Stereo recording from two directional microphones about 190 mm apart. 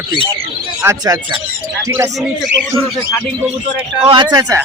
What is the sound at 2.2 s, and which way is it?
Speech, centre (ahead or behind).